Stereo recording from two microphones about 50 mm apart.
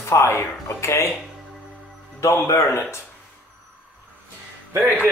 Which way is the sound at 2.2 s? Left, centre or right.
Left.